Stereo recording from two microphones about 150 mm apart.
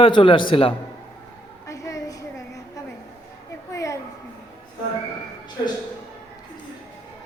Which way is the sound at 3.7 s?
20° left (ahead or behind).